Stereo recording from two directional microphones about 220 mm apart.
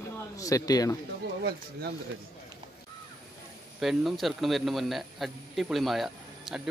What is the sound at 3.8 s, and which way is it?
Speech, centre (ahead or behind).